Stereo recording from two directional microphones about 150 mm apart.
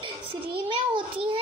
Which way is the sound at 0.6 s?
35° right (ahead or behind).